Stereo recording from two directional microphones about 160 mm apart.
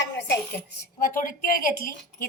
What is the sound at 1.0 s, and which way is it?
Speech, 55° left (ahead or behind).